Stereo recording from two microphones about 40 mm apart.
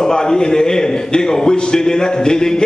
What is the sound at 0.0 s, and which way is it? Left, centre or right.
A man's voice, centre.